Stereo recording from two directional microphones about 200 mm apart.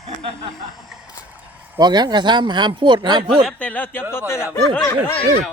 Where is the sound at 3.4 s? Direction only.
5° left (ahead or behind).